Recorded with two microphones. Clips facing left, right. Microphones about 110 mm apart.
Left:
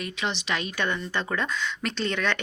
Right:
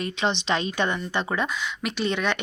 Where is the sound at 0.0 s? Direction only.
30° right (ahead or behind).